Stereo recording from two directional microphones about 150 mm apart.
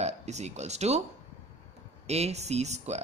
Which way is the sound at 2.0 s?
45° right (ahead or behind).